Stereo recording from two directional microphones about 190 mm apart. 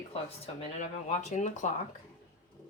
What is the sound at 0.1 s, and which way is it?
Speech, 35° left (ahead or behind).